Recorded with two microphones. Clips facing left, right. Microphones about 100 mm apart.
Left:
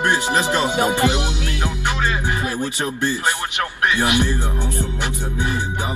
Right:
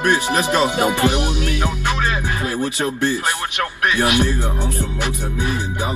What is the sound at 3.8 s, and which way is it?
Music, 20° left (ahead or behind).